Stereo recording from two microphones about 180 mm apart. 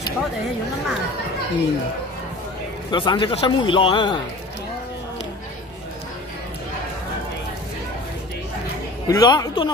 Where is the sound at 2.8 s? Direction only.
25° left (ahead or behind).